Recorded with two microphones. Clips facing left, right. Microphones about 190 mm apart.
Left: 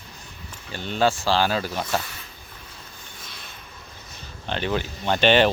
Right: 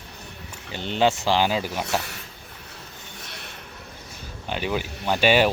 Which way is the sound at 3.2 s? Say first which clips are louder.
Right 3 dB; 70° right (ahead or behind).